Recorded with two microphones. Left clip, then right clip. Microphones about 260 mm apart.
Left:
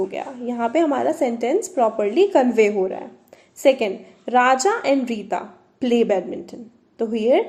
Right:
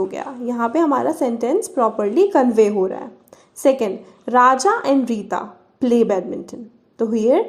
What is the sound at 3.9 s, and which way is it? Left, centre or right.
A woman's voice, right.